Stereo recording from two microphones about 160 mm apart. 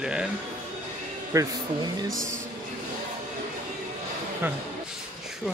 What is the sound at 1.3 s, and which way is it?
Speech, 20° right (ahead or behind).